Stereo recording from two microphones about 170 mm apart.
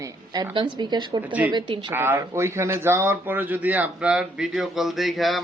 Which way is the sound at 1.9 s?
15° right (ahead or behind).